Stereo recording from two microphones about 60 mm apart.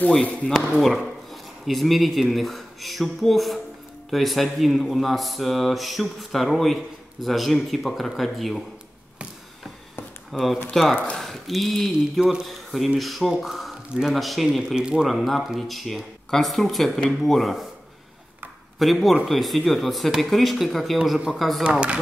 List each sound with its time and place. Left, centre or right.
0.2 s speech: left
0.5 s speech: centre
10.3 s speech: centre
14.8 s speech: centre
15.0 s speech: centre
18.8 s speech: centre
21.6 s speech: centre